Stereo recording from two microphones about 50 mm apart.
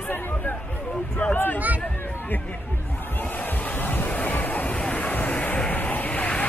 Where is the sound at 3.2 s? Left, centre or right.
Left.